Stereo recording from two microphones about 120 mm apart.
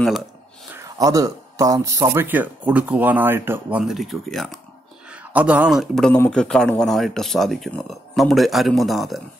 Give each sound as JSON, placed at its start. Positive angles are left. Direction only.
{"t": 0.7, "sound": "speech", "side_deg": -30}
{"t": 3.8, "sound": "speech", "side_deg": 0}
{"t": 5.0, "sound": "a man's voice", "side_deg": -10}